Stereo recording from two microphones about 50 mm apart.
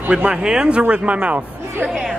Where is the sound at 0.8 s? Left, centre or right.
Right.